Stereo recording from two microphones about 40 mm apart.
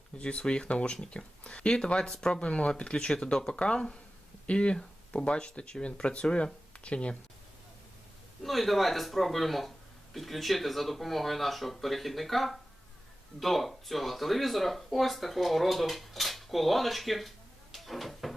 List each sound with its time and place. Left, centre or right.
0.2 s speech: left
8.4 s speech: centre